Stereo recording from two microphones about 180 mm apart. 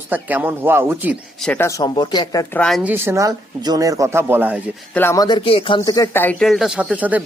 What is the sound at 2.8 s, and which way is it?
Speech, 10° right (ahead or behind).